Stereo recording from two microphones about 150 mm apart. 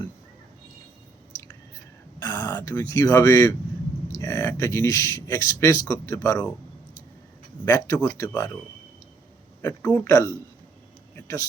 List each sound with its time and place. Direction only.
2.4 s speech: 20° left (ahead or behind)
7.6 s speech: 20° left (ahead or behind)
9.6 s a man's voice: 15° left (ahead or behind)